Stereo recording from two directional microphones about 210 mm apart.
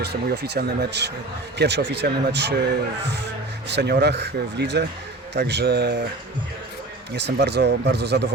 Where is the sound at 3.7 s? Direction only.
50° right (ahead or behind).